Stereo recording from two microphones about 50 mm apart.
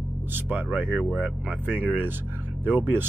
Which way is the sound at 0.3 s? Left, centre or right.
Right.